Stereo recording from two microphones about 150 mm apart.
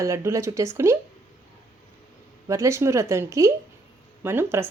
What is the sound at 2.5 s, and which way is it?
Speech, 20° right (ahead or behind).